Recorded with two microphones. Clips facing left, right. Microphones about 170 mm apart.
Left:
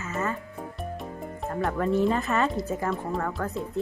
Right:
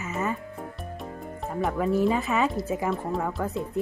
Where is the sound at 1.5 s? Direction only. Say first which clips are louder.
Even; 5° right (ahead or behind).